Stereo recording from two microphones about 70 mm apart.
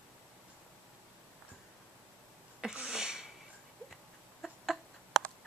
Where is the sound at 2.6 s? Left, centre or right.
Centre.